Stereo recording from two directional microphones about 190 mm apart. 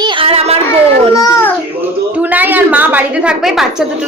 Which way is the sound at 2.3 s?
10° right (ahead or behind).